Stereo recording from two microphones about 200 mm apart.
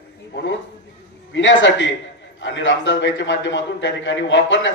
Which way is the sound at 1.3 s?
65° left (ahead or behind).